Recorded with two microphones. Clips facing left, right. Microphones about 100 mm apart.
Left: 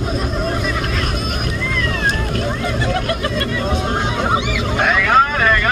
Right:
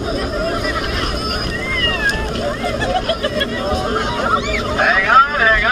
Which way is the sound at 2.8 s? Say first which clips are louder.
Right 3 dB; 35° right (ahead or behind).